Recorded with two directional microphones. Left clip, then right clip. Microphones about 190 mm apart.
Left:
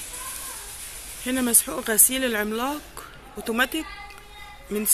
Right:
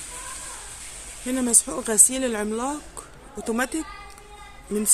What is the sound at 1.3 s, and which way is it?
Speech, 10° right (ahead or behind).